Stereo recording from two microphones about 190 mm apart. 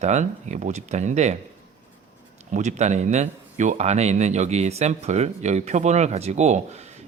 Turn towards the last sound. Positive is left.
turn(degrees=-35)  # may be behind; listen again after turning